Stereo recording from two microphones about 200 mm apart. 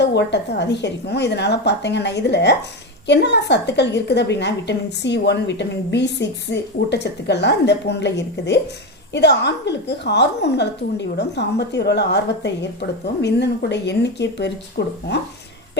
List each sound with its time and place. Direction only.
0.0 s a woman's voice: 60° left (ahead or behind)